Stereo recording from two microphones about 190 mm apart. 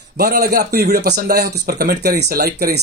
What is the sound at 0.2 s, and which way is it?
Speech, 55° right (ahead or behind).